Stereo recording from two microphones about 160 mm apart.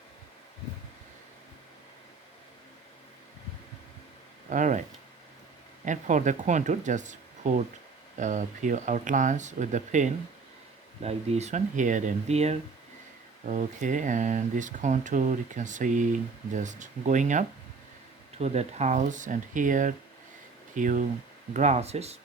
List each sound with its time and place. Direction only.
4.4 s speech: 50° right (ahead or behind)
5.8 s speech: 50° right (ahead or behind)